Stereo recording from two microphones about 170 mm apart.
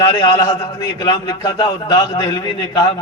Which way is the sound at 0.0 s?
20° left (ahead or behind).